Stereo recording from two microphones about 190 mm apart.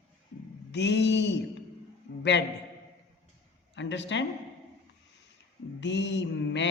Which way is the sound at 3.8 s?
70° left (ahead or behind).